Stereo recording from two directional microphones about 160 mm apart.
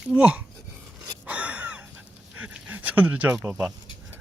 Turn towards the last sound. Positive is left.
turn(degrees=-10)  # may be behind; listen again after turning